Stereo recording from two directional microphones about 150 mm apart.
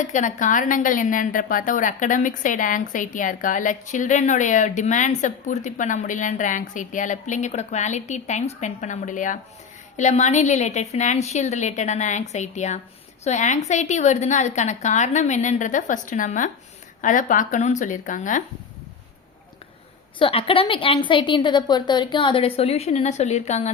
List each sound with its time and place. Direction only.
0.0 s a woman's voice: 55° left (ahead or behind)
20.1 s a woman's voice: 35° left (ahead or behind)